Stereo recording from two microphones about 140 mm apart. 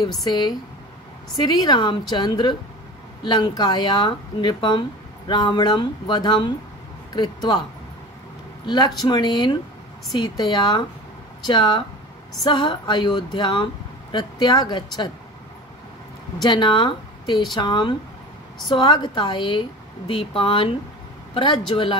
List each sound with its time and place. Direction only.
0.2 s a woman's voice: 30° left (ahead or behind)
8.6 s a woman's voice: 30° left (ahead or behind)
16.4 s speech: 30° left (ahead or behind)